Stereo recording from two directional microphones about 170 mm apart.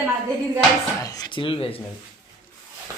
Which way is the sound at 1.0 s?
20° left (ahead or behind).